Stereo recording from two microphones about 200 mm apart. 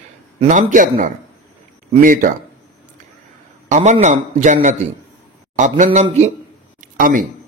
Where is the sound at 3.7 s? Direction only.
35° right (ahead or behind).